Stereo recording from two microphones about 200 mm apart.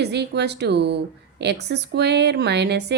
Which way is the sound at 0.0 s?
55° right (ahead or behind).